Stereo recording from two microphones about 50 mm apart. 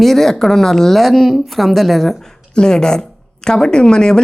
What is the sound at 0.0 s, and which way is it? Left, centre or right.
A woman's voice, centre.